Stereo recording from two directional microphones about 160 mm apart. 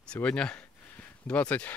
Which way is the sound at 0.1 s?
5° left (ahead or behind).